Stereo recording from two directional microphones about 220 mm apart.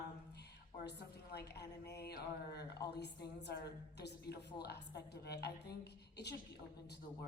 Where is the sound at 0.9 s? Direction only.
50° left (ahead or behind).